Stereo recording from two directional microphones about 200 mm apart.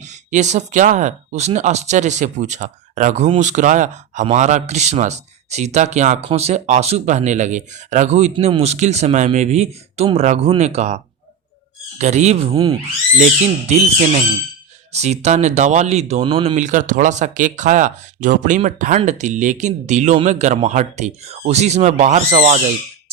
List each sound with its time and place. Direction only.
0.3 s speech: 35° right (ahead or behind)
16.6 s speech: 35° right (ahead or behind)